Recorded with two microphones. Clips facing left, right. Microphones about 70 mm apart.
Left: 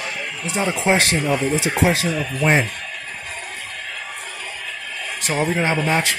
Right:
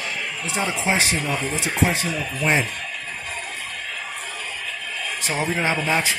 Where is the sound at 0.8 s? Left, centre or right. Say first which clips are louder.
Left 5 dB; left.